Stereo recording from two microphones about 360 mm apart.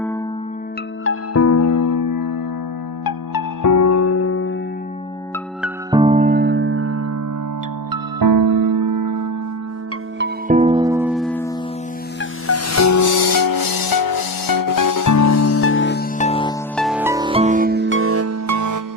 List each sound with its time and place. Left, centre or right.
1.0 s music: left
5.6 s music: centre; by 7.2 s right
7.9 s music: right
10.2 s music: right; by 11.5 s centre
12.2 s music: left; by 16.6 s centre
16.7 s music: centre; by 18.8 s right